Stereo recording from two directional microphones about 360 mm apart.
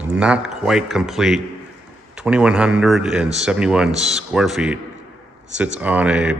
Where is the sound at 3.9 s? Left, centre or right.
Centre.